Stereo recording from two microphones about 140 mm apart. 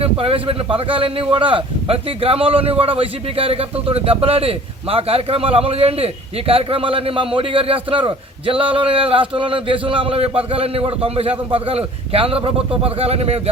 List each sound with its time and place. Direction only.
0.0 s a man's voice: 40° right (ahead or behind)